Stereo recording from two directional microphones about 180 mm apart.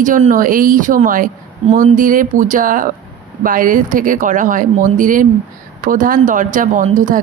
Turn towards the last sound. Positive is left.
turn(degrees=-45)  # may be behind; listen again after turning